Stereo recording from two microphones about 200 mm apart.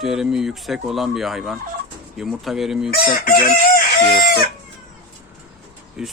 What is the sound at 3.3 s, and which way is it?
Chicken, 50° left (ahead or behind).